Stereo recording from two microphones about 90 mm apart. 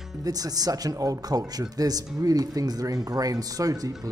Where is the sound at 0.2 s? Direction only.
45° right (ahead or behind).